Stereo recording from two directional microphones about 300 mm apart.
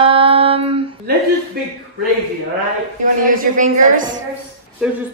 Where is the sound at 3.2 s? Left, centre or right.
Right.